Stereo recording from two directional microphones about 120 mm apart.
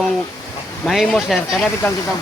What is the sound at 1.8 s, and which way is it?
Speech, 20° left (ahead or behind).